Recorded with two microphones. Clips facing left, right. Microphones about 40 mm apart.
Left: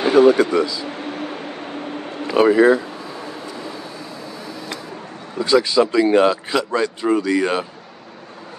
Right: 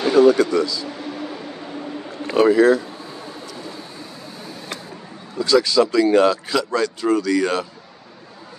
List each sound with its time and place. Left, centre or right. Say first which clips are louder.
0.0 s speech: left 1 dB; left
0.9 s vehicle: left 2 dB; left
2.3 s speech: left 1 dB; centre
5.4 s speech: left 1 dB; left